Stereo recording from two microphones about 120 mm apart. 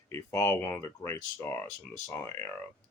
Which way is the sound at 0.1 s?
20° left (ahead or behind).